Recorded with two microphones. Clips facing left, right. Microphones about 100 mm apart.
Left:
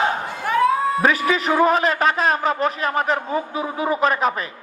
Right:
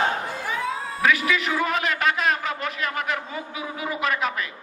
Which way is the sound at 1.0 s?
35° left (ahead or behind).